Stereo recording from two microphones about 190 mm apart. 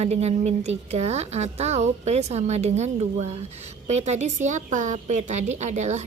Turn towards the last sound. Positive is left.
turn(degrees=-40)  # may be behind; listen again after turning